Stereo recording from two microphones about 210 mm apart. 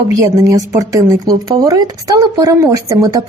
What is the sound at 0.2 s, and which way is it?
Speech, 15° right (ahead or behind).